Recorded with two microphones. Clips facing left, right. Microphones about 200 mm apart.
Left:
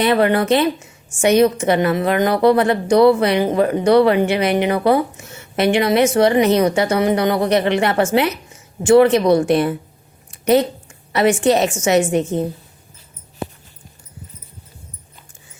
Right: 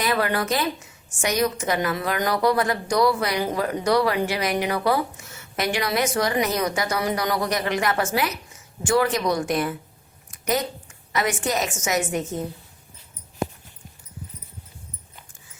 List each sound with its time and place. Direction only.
0.0 s a woman's voice: 25° left (ahead or behind)